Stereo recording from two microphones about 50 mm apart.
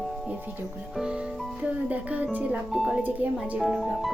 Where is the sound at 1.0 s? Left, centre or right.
Right.